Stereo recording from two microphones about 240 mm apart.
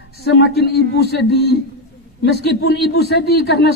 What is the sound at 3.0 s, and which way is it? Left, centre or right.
Speech, left.